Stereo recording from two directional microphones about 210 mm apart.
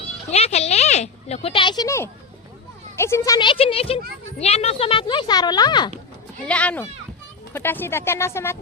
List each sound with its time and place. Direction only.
0.3 s speech: 30° left (ahead or behind)
6.4 s speech: 5° left (ahead or behind)